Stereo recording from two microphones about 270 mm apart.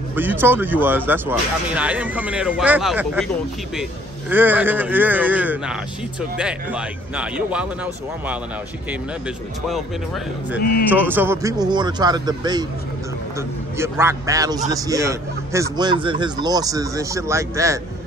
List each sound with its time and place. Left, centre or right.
0.1 s speech: centre
4.3 s a man's voice: centre
10.6 s speech: left
11.1 s speech: centre
13.7 s speech: centre